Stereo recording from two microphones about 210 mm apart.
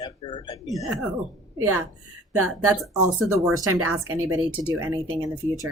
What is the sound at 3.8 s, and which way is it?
Speech, 85° right.